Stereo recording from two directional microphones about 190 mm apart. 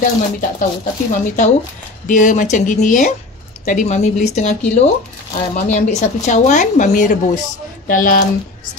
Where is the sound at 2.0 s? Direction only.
40° left (ahead or behind).